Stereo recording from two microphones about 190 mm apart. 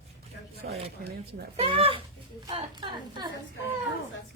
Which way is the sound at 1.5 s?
30° right (ahead or behind).